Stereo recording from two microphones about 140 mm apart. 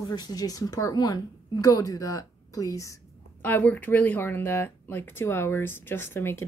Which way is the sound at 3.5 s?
10° left (ahead or behind).